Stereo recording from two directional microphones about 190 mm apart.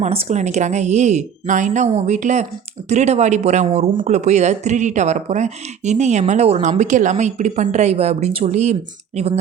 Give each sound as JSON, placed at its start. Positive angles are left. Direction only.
{"t": 0.0, "sound": "speech", "side_deg": -35}